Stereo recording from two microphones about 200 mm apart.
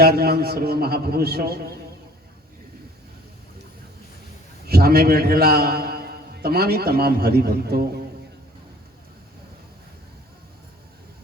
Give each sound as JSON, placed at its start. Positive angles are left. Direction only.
{"t": 0.0, "sound": "a man's voice", "side_deg": -50}
{"t": 4.6, "sound": "a man's voice", "side_deg": -50}